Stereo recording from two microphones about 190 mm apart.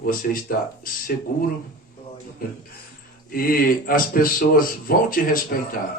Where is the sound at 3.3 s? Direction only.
50° left (ahead or behind).